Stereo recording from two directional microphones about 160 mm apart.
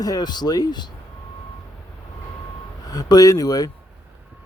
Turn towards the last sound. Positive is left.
turn(degrees=25)  # may be behind; listen again after turning